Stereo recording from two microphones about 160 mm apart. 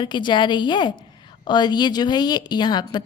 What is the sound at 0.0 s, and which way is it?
A woman's voice, 30° left (ahead or behind).